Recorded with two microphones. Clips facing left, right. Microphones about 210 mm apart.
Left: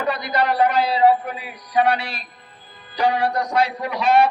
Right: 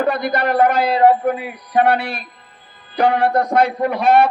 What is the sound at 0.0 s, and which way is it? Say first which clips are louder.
Music: right 4 dB; 50° right (ahead or behind).